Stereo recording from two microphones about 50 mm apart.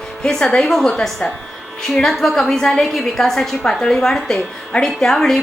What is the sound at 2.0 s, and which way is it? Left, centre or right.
A woman's voice, centre.